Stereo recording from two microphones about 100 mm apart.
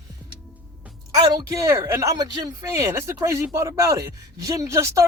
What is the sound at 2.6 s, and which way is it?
Speech, 30° right (ahead or behind).